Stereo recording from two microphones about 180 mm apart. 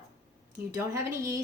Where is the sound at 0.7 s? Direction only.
15° right (ahead or behind).